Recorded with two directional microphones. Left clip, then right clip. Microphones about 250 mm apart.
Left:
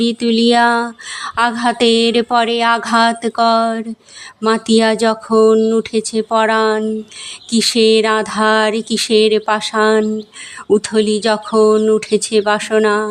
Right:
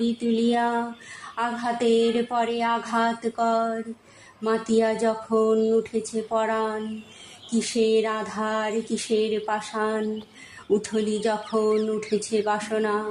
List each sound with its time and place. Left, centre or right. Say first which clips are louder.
0.0 s a woman's voice: left 10 dB; left